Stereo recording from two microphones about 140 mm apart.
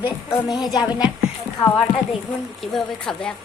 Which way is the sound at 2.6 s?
Centre (ahead or behind).